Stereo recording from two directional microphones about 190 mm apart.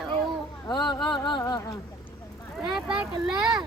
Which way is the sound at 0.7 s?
20° left (ahead or behind).